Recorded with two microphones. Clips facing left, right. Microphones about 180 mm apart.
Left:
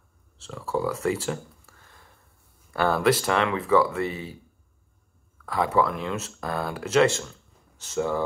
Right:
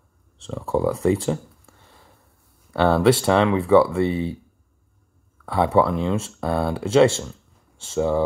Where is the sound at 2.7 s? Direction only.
25° right (ahead or behind).